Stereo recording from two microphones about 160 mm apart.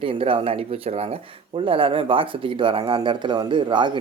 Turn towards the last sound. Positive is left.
turn(degrees=-30)  # may be behind; listen again after turning